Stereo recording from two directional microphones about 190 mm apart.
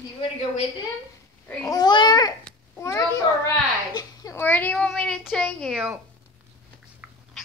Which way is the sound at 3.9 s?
20° left (ahead or behind).